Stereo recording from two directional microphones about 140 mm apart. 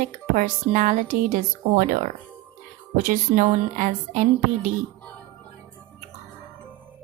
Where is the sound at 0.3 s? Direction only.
60° right (ahead or behind).